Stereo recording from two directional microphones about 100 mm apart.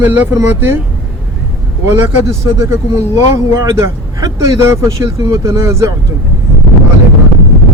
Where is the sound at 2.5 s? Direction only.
30° right (ahead or behind).